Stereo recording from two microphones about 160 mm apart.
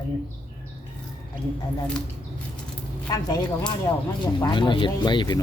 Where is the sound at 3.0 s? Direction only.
25° left (ahead or behind).